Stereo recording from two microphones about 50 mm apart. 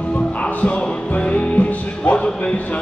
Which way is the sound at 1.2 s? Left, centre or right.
Left.